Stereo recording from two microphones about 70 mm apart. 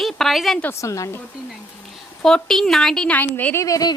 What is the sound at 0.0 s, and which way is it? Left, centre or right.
Speech, centre.